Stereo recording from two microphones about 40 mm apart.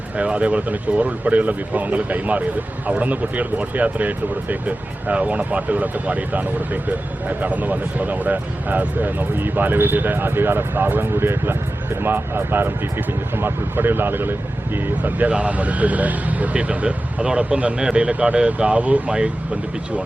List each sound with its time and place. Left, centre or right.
0.2 s speech: right
15.3 s speech: right